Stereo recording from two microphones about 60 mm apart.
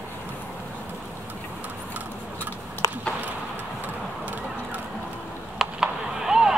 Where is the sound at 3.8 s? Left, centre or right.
Right.